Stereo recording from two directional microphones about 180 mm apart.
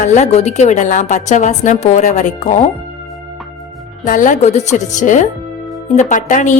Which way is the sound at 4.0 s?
45° left (ahead or behind).